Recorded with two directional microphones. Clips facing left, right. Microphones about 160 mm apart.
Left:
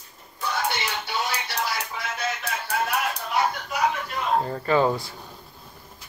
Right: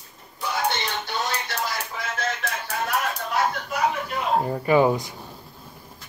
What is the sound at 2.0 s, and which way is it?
Music, centre (ahead or behind).